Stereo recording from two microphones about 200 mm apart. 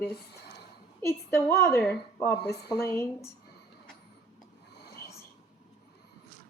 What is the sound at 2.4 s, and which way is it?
Speech, 55° left (ahead or behind).